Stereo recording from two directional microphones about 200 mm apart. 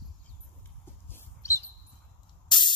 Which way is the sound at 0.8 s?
10° left (ahead or behind).